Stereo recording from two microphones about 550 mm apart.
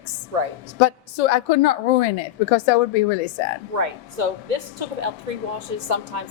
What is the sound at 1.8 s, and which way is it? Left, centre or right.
A woman's voice, left.